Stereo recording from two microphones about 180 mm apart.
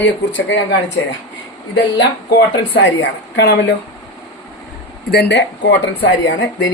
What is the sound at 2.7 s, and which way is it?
Speech, 70° left (ahead or behind).